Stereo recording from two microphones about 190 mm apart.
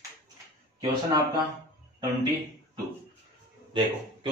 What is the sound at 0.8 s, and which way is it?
Speech, 20° right (ahead or behind).